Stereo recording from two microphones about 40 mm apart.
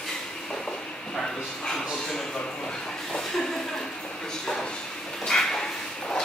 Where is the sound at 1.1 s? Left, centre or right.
Centre.